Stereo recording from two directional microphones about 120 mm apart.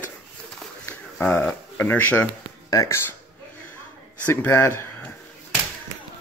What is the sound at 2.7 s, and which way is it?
Speech, 25° left (ahead or behind).